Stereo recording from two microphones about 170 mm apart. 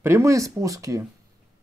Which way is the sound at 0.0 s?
15° right (ahead or behind).